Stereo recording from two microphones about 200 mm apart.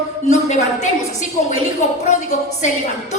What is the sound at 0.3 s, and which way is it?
A woman's voice, 35° left (ahead or behind).